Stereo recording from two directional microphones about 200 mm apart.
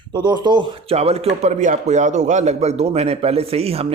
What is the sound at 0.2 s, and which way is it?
Speech, 20° right (ahead or behind).